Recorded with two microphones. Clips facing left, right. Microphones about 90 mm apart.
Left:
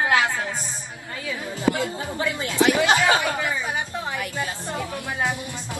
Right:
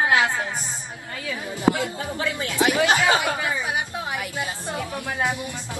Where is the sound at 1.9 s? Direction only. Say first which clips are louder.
Even; 20° left (ahead or behind).